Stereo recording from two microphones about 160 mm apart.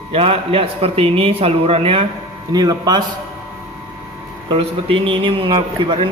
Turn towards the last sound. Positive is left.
turn(degrees=-30)  # may be behind; listen again after turning